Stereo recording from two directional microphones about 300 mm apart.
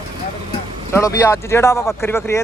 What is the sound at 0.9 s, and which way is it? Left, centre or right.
Speech, centre.